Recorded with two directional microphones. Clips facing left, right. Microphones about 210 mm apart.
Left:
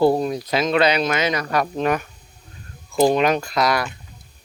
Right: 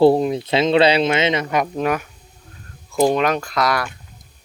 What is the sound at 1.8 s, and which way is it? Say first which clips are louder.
Speech: even; 5° right (ahead or behind).